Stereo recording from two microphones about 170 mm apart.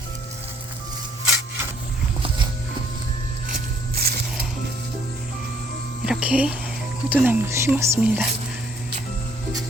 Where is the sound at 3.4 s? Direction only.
60° right (ahead or behind).